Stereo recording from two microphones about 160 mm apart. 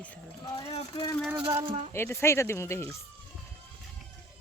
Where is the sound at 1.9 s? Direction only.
15° left (ahead or behind).